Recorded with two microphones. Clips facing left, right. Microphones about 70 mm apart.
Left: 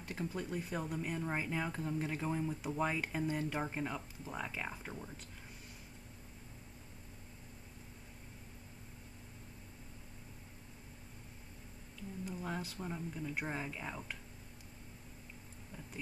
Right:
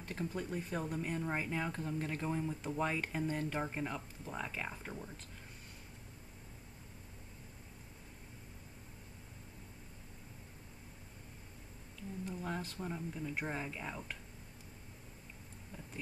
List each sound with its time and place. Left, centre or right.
0.0 s speech: centre
12.3 s speech: centre